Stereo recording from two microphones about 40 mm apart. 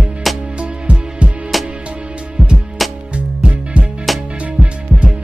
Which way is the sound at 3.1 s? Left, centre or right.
Right.